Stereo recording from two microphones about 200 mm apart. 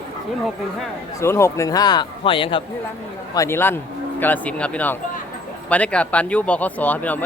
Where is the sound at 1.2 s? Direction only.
15° left (ahead or behind).